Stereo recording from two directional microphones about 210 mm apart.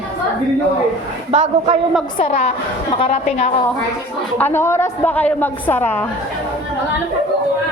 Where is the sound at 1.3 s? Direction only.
30° right (ahead or behind).